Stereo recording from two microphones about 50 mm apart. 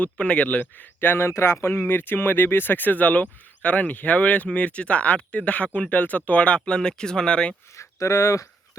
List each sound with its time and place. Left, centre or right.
0.0 s speech: left
0.9 s speech: left; by 7.5 s centre
7.8 s speech: left